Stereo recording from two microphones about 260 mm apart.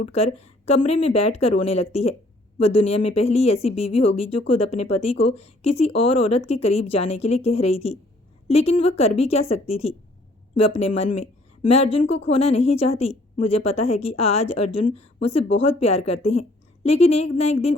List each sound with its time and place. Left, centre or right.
0.0 s a woman's voice: left